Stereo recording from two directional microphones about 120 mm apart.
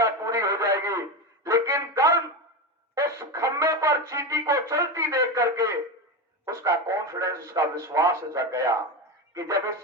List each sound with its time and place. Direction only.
0.0 s radio: 25° right (ahead or behind)
1.5 s a sound: 25° right (ahead or behind)
2.9 s music: 25° right (ahead or behind)
6.4 s speech: 25° right (ahead or behind)